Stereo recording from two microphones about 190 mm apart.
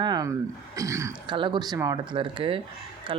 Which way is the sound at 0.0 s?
20° right (ahead or behind).